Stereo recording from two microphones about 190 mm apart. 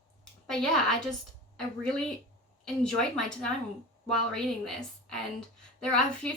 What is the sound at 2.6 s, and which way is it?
Speech, 5° left (ahead or behind).